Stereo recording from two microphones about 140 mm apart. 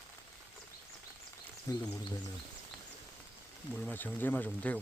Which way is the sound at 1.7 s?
25° left (ahead or behind).